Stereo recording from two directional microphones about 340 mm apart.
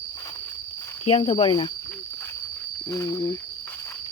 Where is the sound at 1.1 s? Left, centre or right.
Centre.